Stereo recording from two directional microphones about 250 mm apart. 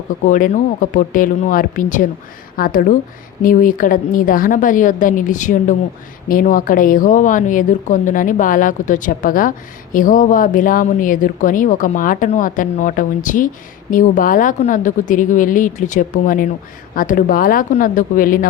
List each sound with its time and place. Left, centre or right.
0.3 s speech: left